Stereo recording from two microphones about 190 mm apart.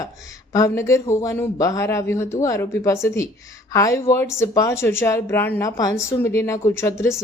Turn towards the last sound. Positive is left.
turn(degrees=15)  # may be behind; listen again after turning